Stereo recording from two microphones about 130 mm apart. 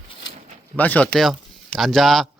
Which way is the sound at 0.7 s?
10° left (ahead or behind).